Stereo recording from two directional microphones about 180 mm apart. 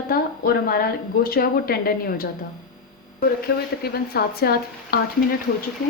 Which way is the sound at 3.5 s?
60° left (ahead or behind).